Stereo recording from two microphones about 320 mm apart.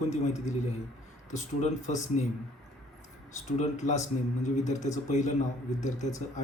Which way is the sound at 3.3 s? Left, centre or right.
Left.